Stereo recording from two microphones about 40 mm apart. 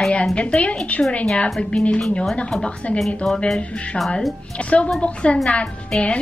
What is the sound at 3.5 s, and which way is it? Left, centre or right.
A woman's voice, left.